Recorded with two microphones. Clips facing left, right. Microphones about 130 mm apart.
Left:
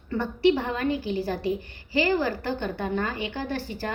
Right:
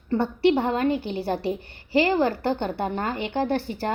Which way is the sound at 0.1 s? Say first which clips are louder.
Right 2 dB; 25° right (ahead or behind).